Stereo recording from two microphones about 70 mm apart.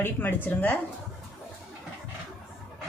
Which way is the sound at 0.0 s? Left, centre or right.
Left.